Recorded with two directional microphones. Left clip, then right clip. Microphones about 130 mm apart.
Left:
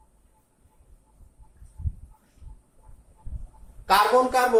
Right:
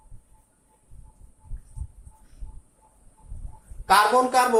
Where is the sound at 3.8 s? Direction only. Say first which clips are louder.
Right 1 dB; 40° right (ahead or behind).